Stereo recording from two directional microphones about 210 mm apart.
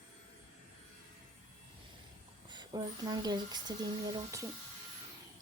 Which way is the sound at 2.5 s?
20° right (ahead or behind).